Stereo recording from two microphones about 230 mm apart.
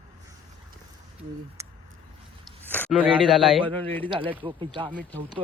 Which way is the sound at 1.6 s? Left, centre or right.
Centre.